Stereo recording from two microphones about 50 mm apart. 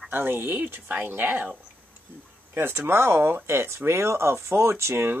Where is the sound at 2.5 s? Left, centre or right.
Right.